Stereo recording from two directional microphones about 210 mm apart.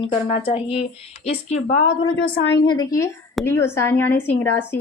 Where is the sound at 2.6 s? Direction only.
20° left (ahead or behind).